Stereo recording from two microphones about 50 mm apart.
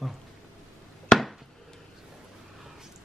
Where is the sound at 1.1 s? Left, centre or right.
Centre.